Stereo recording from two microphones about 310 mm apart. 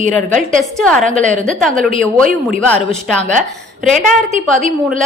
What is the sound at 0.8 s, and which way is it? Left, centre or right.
A woman's voice, centre.